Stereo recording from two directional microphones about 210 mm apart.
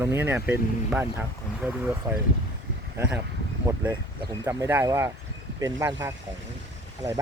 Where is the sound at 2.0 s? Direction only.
15° right (ahead or behind).